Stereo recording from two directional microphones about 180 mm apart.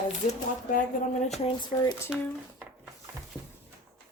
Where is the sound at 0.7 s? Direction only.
40° left (ahead or behind).